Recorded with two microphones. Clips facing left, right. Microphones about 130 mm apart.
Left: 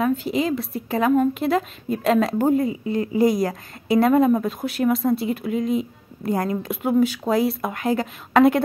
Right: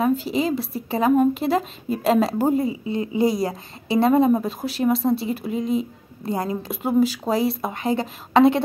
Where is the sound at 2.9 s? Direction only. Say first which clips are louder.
Left 3 dB; 25° right (ahead or behind).